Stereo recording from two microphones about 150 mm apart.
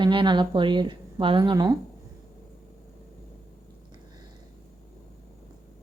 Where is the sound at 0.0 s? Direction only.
30° right (ahead or behind).